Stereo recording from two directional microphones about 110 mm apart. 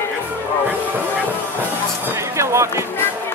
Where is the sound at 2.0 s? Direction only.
25° right (ahead or behind).